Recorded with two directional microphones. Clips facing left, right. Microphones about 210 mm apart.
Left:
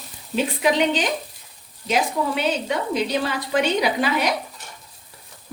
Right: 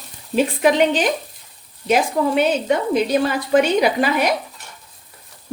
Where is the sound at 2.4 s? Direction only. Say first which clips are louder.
Right 6 dB; 50° right (ahead or behind).